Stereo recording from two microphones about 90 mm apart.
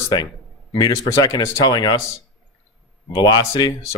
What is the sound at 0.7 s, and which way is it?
Speech, 50° left (ahead or behind).